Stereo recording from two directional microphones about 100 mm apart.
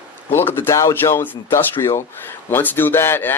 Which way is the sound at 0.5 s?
25° left (ahead or behind).